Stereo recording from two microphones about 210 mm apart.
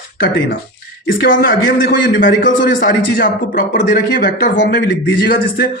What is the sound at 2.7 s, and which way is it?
Speech, 40° left (ahead or behind).